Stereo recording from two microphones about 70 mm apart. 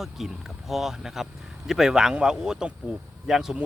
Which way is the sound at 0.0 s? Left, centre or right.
Centre.